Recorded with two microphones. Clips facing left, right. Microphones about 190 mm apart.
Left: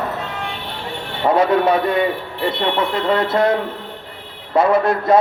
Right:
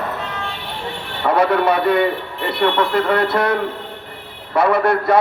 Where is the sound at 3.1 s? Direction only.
65° right (ahead or behind).